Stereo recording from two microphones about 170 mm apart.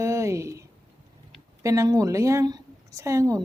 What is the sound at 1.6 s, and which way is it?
A woman's voice, 20° right (ahead or behind).